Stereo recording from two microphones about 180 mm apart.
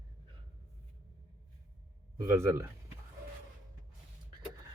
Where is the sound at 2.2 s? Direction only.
15° right (ahead or behind).